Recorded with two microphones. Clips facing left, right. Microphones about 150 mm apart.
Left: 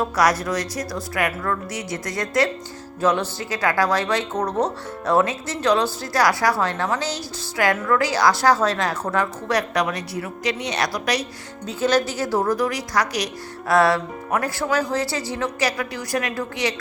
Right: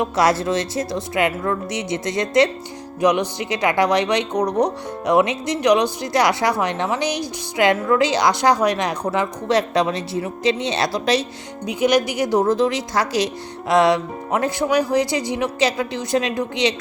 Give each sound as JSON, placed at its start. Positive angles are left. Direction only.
{"t": 0.0, "sound": "speech", "side_deg": -25}
{"t": 11.6, "sound": "speech", "side_deg": -15}